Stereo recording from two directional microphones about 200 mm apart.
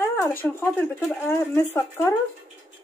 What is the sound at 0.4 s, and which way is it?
Speech, 10° left (ahead or behind).